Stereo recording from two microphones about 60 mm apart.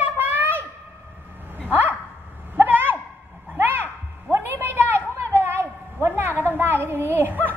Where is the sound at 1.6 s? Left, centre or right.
Right.